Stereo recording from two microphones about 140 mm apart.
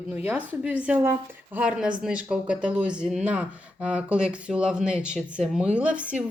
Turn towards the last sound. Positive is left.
turn(degrees=-10)  # may be behind; listen again after turning